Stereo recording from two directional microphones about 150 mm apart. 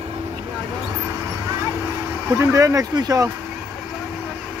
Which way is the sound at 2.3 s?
20° right (ahead or behind).